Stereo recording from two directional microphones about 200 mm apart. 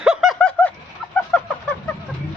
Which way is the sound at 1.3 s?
5° left (ahead or behind).